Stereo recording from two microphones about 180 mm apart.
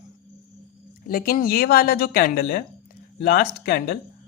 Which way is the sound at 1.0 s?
55° left (ahead or behind).